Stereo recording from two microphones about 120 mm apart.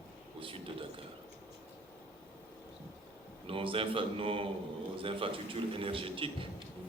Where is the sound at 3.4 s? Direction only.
50° right (ahead or behind).